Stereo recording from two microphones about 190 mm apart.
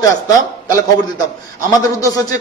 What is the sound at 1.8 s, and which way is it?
Speech, 20° left (ahead or behind).